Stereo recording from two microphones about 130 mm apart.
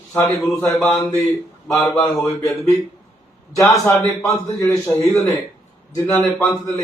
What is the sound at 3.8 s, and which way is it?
A man's voice, 25° left (ahead or behind).